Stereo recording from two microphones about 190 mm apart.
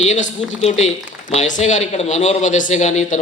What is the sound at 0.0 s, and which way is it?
Speech, 35° left (ahead or behind).